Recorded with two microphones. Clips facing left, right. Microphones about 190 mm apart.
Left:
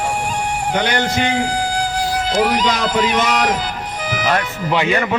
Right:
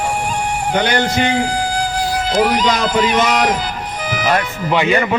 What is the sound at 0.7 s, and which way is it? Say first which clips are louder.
Speech: right 3 dB; 35° right (ahead or behind).